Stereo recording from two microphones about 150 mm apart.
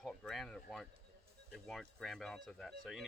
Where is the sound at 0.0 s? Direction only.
Centre (ahead or behind).